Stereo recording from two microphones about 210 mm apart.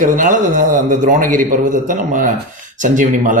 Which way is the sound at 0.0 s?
40° right (ahead or behind).